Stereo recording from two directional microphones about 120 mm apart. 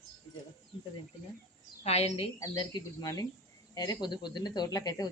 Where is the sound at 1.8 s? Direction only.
60° left (ahead or behind).